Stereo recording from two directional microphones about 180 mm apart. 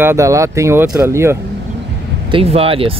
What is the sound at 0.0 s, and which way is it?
Speech, 15° right (ahead or behind).